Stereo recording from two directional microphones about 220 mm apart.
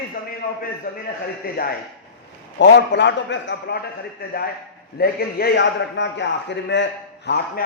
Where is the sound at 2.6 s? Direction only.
55° left (ahead or behind).